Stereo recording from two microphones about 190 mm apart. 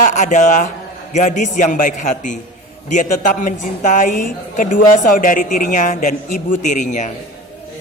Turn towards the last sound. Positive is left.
turn(degrees=40)  # may be behind; listen again after turning